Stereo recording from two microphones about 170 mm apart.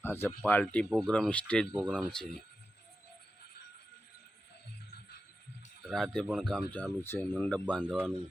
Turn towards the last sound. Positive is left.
turn(degrees=5)  # may be behind; listen again after turning